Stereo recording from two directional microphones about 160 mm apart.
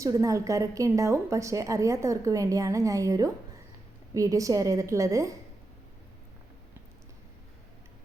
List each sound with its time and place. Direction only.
0.0 s a woman's voice: 20° right (ahead or behind)